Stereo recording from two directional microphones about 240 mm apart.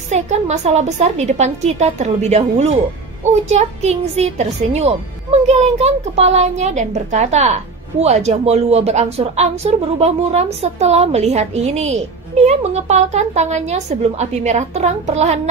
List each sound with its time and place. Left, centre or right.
0.1 s a woman's voice: right